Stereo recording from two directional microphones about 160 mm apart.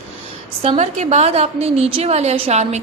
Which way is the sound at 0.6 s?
40° right (ahead or behind).